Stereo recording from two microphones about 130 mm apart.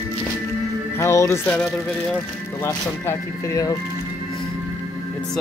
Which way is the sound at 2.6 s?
20° left (ahead or behind).